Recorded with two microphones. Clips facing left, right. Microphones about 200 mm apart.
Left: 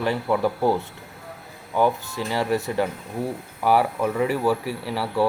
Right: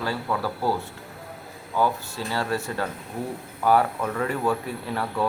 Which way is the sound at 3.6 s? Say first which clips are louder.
Left 1 dB; 10° left (ahead or behind).